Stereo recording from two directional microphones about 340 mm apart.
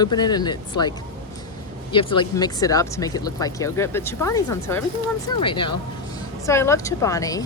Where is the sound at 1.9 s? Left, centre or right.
Centre.